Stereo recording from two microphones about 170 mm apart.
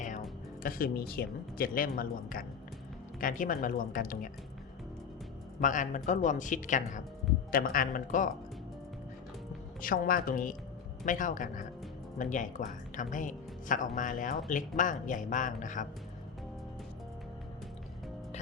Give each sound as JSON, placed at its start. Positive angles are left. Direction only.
{"t": 0.0, "sound": "speech", "side_deg": 45}
{"t": 5.5, "sound": "speech", "side_deg": 50}
{"t": 9.8, "sound": "speech", "side_deg": 55}